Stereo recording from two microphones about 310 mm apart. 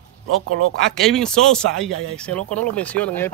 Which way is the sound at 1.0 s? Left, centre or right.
Centre.